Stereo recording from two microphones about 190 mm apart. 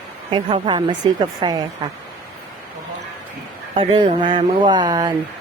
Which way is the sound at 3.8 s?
25° right (ahead or behind).